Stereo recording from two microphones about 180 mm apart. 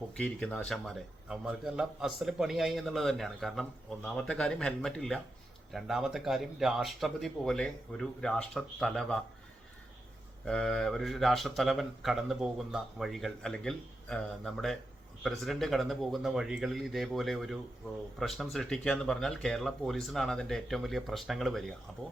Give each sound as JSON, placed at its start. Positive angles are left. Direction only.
{"t": 0.1, "sound": "a man's voice", "side_deg": 5}
{"t": 10.4, "sound": "a man's voice", "side_deg": 5}